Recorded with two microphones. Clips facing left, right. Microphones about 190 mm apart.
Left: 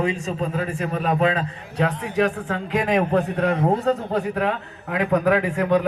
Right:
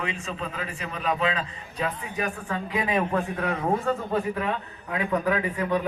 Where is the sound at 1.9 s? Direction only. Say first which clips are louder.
Left 9 dB; 70° left (ahead or behind).